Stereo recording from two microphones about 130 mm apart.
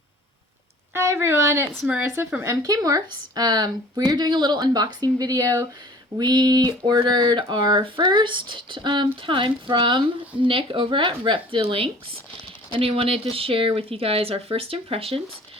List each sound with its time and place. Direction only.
0.9 s a sound: 20° right (ahead or behind)
1.7 s speech: centre (ahead or behind)
2.0 s speech: 15° right (ahead or behind); by 15.2 s 45° right (ahead or behind)